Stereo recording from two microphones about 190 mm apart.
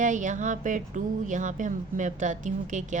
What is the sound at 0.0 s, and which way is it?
A woman's voice, 40° right (ahead or behind).